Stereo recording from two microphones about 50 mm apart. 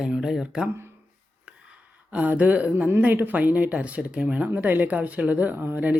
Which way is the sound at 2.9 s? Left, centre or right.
Right.